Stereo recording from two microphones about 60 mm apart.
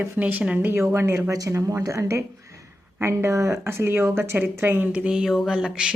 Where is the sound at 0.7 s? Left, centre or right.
Right.